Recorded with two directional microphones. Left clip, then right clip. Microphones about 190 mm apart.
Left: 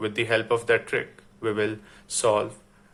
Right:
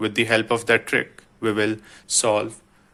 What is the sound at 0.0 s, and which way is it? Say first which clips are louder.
Speech: right 4 dB; 40° right (ahead or behind).